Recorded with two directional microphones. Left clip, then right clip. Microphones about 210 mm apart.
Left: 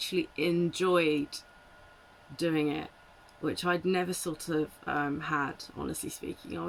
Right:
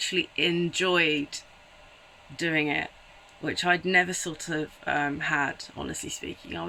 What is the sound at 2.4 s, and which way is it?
Speech, 15° left (ahead or behind).